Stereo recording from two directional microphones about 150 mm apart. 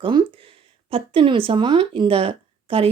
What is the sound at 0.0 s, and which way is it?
Speech, 30° right (ahead or behind).